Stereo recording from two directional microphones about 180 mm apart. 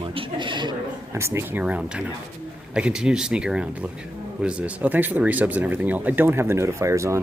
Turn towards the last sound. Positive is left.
turn(degrees=-15)  # may be behind; listen again after turning